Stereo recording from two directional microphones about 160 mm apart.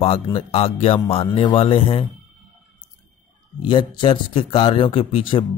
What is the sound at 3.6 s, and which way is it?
Speech, 30° left (ahead or behind).